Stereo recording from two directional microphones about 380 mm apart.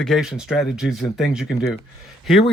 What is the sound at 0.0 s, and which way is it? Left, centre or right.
Speech, centre.